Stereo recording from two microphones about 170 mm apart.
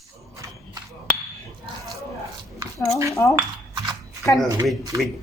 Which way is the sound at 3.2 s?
15° left (ahead or behind).